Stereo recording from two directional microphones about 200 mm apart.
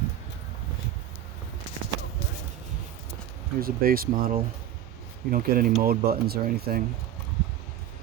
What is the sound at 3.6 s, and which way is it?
Speech, 45° right (ahead or behind).